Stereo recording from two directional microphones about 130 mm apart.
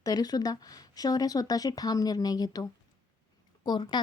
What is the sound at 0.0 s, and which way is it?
Speech, 30° left (ahead or behind).